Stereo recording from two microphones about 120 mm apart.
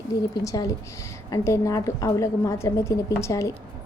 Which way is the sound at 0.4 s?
30° left (ahead or behind).